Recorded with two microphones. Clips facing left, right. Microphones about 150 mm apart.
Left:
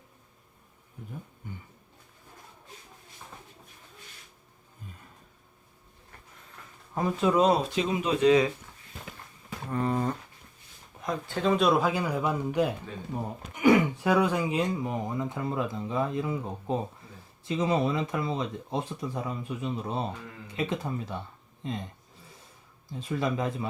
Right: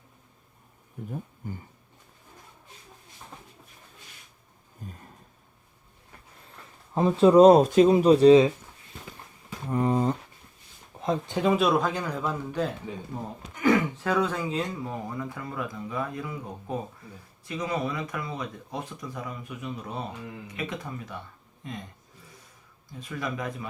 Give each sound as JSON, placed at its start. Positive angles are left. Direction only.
{"t": 1.4, "sound": "speech", "side_deg": -40}
{"t": 6.9, "sound": "speech", "side_deg": -30}
{"t": 9.6, "sound": "a sound", "side_deg": -20}
{"t": 11.0, "sound": "speech", "side_deg": -20}
{"t": 11.5, "sound": "speech", "side_deg": 0}
{"t": 22.9, "sound": "speech", "side_deg": 25}